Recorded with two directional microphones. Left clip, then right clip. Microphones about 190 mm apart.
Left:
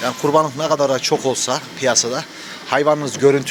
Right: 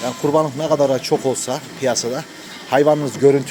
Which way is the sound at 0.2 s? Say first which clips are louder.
Left 1 dB; 10° right (ahead or behind).